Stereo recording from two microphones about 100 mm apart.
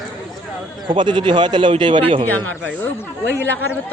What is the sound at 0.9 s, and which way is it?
A man's voice, 50° right (ahead or behind).